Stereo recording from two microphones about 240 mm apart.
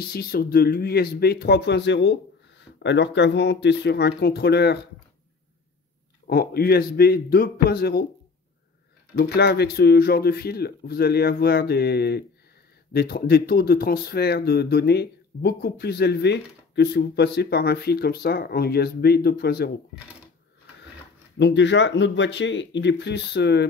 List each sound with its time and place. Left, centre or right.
0.1 s speech: left
6.2 s speech: left
9.2 s speech: left
21.4 s speech: left